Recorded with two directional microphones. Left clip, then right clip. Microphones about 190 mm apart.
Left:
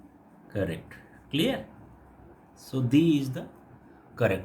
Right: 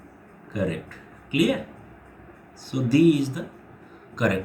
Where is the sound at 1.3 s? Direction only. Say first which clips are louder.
Right 4 dB; 55° left (ahead or behind).